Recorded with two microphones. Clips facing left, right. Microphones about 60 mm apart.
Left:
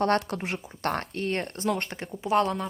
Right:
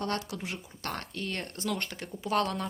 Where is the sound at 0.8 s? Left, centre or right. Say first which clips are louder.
Left 8 dB; left.